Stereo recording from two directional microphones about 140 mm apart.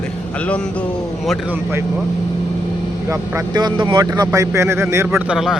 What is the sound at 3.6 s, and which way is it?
Speech, 35° right (ahead or behind).